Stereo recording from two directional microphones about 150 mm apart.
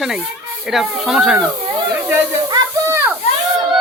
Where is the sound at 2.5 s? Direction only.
20° right (ahead or behind).